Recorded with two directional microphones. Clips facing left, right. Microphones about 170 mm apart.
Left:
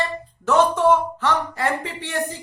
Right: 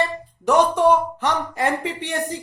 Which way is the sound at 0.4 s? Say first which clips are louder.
Right 1 dB; 15° right (ahead or behind).